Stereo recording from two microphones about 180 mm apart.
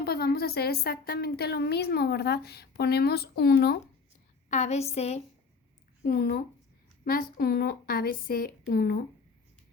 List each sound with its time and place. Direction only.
0.0 s a woman's voice: 60° left (ahead or behind)
4.4 s a woman's voice: 40° left (ahead or behind)
6.0 s a woman's voice: 55° left (ahead or behind)